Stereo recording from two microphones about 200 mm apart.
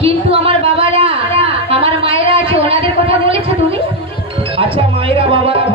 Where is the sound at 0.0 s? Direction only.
30° right (ahead or behind).